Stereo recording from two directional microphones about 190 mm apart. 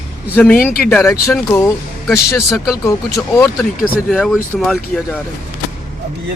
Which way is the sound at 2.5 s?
Centre (ahead or behind).